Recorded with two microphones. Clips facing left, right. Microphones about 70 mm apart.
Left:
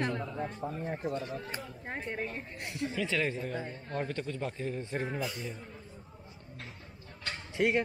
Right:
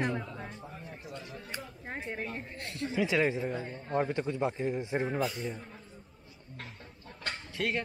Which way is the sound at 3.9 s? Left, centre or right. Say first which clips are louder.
Right 5 dB; centre.